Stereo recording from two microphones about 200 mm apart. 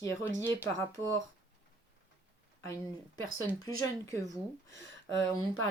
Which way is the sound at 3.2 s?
15° left (ahead or behind).